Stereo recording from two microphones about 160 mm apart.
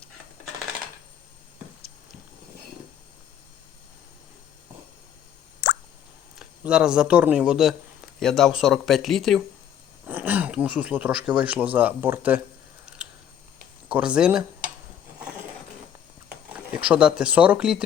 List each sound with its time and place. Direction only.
5.6 s plop: 90° left
6.4 s speech: 5° right (ahead or behind)
10.1 s speech: 10° right (ahead or behind)
13.8 s speech: 5° right (ahead or behind)
16.5 s speech: 10° right (ahead or behind)